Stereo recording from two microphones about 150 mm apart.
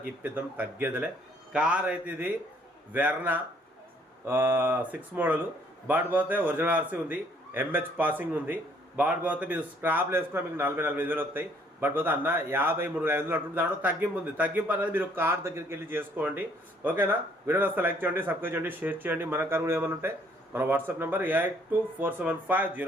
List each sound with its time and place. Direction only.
0.2 s a man's voice: 10° right (ahead or behind)